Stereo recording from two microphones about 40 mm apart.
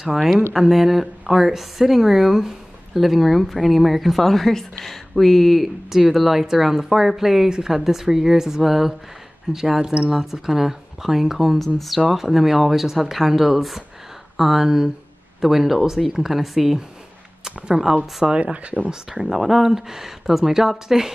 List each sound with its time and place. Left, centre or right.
0.0 s a woman's voice: centre
5.9 s speech: centre
17.9 s speech: right
19.2 s speech: centre